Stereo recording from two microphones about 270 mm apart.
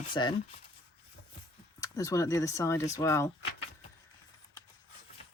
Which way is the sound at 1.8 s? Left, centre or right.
Centre.